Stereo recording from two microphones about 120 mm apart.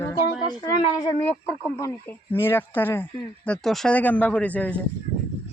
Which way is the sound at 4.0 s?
15° left (ahead or behind).